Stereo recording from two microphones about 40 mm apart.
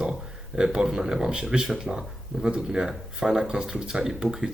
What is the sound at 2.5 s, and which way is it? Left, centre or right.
Speech, right.